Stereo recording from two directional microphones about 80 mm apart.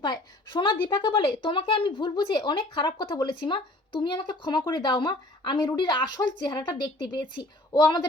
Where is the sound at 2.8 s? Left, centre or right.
Left.